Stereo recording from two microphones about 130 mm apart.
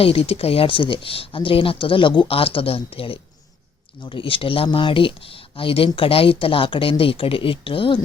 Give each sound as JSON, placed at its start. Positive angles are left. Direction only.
{"t": 0.0, "sound": "speech", "side_deg": 50}